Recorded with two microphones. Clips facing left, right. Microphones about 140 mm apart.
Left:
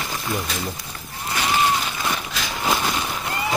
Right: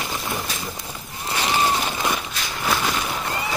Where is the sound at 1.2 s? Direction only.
35° right (ahead or behind).